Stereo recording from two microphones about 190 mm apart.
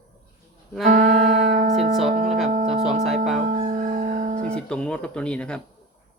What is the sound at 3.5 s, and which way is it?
Music, 40° right (ahead or behind).